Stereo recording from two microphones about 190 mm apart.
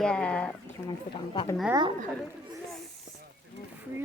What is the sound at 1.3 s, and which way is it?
Speech, 25° left (ahead or behind).